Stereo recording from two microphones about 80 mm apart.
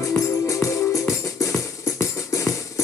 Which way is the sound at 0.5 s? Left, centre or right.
Left.